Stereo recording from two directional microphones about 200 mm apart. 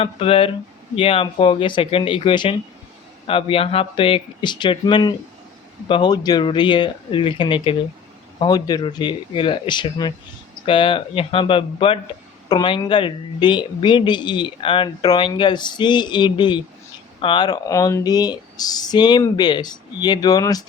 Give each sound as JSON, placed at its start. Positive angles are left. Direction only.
{"t": 0.0, "sound": "speech", "side_deg": 30}